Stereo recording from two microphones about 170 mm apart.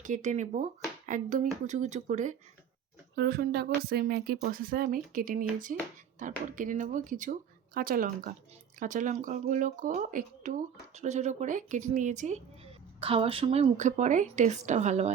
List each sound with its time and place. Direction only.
0.0 s speech: 50° right (ahead or behind)
3.2 s speech: 65° right (ahead or behind); by 12.4 s 45° right (ahead or behind)
13.0 s a woman's voice: 35° right (ahead or behind)